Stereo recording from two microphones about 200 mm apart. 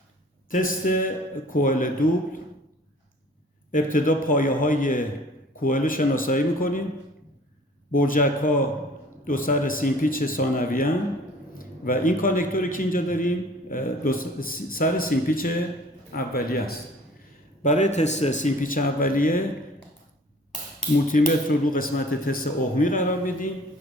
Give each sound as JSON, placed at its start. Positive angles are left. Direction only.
{"t": 0.5, "sound": "a man's voice", "side_deg": 45}
{"t": 3.7, "sound": "a man's voice", "side_deg": 45}
{"t": 7.9, "sound": "a man's voice", "side_deg": 45}
{"t": 21.1, "sound": "a man's voice", "side_deg": 40}